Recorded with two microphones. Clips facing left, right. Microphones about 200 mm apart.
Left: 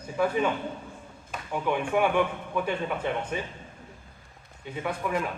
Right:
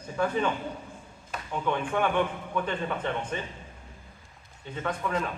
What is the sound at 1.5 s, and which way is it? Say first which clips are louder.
Speech: left 2 dB; 10° left (ahead or behind).